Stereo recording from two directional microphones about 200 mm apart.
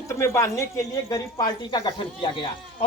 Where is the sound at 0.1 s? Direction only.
15° left (ahead or behind).